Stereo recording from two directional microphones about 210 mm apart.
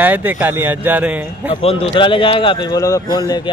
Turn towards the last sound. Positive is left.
turn(degrees=20)  # may be behind; listen again after turning